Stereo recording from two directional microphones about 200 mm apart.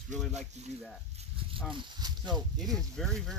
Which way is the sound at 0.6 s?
35° right (ahead or behind).